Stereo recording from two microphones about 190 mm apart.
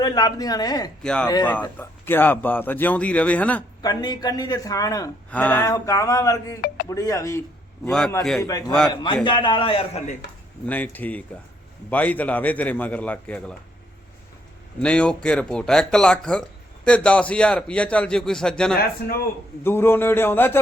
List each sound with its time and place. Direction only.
0.0 s a man's voice: 20° left (ahead or behind)
1.0 s a man's voice: 5° left (ahead or behind)
3.8 s a man's voice: 20° left (ahead or behind)
7.9 s a man's voice: centre (ahead or behind)
8.4 s a man's voice: 20° left (ahead or behind)
10.7 s a man's voice: 10° left (ahead or behind)
14.8 s a man's voice: 5° left (ahead or behind)
18.8 s a man's voice: 50° left (ahead or behind)
19.6 s a man's voice: 10° left (ahead or behind)